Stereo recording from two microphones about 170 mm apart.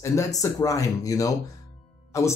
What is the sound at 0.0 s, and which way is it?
Speech, 15° left (ahead or behind).